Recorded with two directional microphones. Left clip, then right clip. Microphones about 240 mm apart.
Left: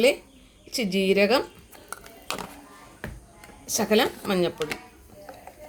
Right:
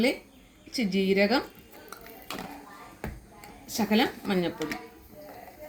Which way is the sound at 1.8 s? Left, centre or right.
Left.